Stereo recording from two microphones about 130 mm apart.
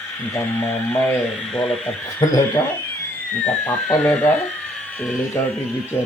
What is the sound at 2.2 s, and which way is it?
Speech, 25° left (ahead or behind).